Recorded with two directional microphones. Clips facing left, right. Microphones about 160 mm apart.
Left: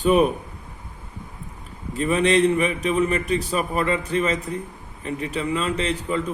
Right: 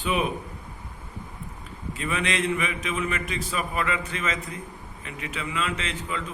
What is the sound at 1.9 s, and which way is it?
A man's voice, 35° left (ahead or behind).